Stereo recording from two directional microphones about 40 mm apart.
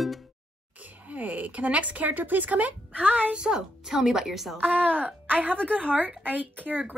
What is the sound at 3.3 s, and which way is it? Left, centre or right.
A woman's voice, centre.